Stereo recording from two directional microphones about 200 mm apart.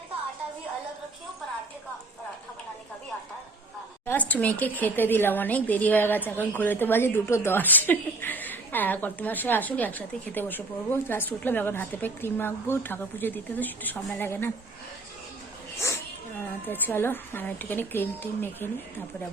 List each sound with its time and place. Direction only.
4.0 s a woman's voice: 10° left (ahead or behind)
16.6 s a woman's voice: 10° left (ahead or behind)